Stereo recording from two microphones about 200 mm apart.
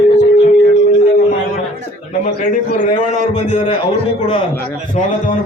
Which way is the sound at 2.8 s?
35° left (ahead or behind).